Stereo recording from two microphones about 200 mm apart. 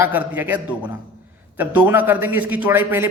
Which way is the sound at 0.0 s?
10° right (ahead or behind).